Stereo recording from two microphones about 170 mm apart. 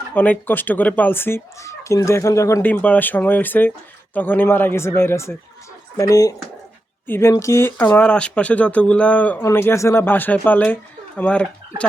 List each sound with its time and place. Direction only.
0.1 s speech: 10° left (ahead or behind)